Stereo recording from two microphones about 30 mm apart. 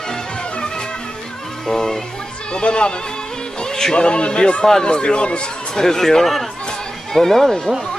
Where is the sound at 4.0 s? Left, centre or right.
Left.